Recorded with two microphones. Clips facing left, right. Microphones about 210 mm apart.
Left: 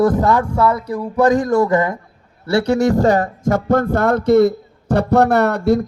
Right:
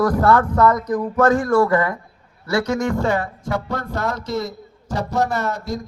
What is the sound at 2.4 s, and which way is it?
Speech, 30° left (ahead or behind).